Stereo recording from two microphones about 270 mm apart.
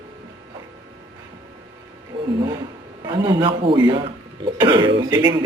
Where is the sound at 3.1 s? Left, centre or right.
Centre.